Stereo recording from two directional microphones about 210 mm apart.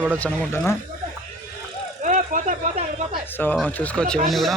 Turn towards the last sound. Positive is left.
turn(degrees=0)  # may be behind; listen again after turning